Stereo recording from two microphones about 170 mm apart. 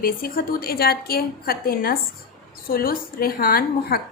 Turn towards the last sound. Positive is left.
turn(degrees=60)  # may be behind; listen again after turning